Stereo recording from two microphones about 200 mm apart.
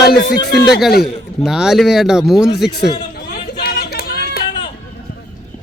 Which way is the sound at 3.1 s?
50° left (ahead or behind).